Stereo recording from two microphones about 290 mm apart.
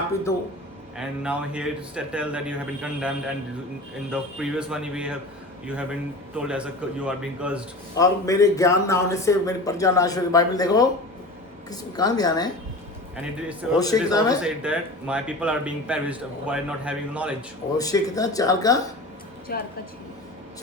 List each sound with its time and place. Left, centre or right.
0.9 s speech: centre
7.9 s a man's voice: centre
13.7 s a man's voice: centre
14.4 s speech: centre
17.7 s a man's voice: centre
19.5 s a woman's voice: left